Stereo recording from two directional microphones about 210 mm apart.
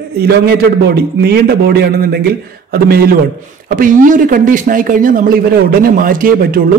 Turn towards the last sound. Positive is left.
turn(degrees=-40)  # may be behind; listen again after turning